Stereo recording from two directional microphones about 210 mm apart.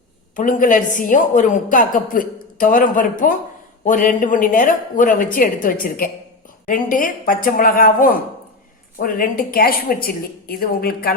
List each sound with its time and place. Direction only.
0.3 s a woman's voice: 40° left (ahead or behind)